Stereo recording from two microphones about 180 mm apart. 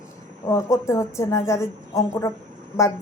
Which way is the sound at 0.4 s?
15° left (ahead or behind).